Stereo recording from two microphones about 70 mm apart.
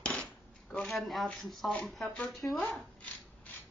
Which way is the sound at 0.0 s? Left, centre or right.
Centre.